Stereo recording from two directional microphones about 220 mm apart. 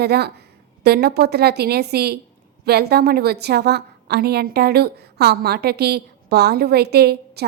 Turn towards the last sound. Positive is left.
turn(degrees=-45)  # may be behind; listen again after turning